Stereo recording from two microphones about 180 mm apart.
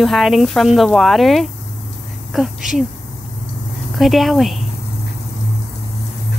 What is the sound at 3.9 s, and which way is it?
Speech, centre (ahead or behind).